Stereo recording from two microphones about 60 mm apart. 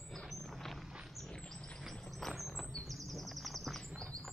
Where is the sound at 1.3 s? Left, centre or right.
Centre.